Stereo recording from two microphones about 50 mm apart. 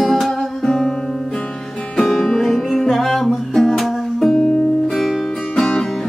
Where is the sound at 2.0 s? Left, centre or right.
Centre.